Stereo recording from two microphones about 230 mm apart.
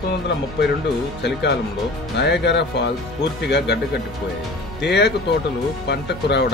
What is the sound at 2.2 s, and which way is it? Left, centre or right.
Speech, left.